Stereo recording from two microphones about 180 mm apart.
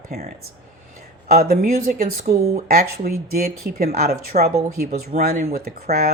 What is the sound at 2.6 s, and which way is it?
Speech, 55° right (ahead or behind).